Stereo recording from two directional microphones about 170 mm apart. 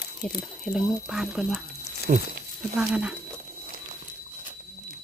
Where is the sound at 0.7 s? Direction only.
Centre (ahead or behind).